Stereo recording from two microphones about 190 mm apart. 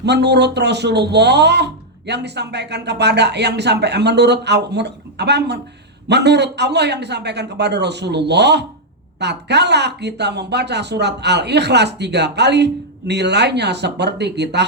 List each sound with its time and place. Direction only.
0.0 s speech: 60° right (ahead or behind)